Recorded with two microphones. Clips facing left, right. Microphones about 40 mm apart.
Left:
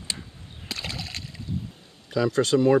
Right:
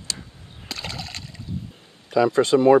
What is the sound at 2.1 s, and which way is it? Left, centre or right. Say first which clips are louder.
Speech: right 4 dB; centre.